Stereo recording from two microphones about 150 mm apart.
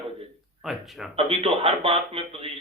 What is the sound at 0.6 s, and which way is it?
Speech, centre (ahead or behind).